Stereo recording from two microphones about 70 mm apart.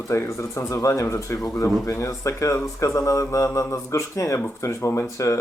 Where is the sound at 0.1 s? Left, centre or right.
Left.